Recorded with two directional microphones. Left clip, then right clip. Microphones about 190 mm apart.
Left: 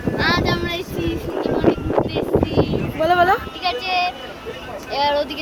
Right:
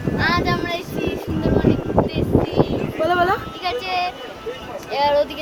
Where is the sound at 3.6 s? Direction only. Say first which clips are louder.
Left 2 dB; 20° right (ahead or behind).